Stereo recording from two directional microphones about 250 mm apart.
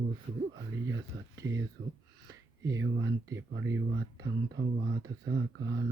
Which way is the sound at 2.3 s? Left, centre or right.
Centre.